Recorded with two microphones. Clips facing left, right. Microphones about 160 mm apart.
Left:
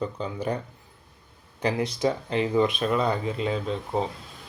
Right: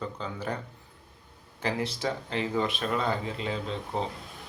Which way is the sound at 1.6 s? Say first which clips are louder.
Left 5 dB; 15° left (ahead or behind).